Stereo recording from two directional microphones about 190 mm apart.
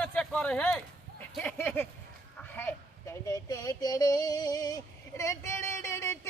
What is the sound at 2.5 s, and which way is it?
Female singing, 10° left (ahead or behind).